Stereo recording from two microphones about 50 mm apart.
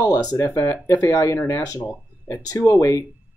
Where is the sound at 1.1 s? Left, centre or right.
Left.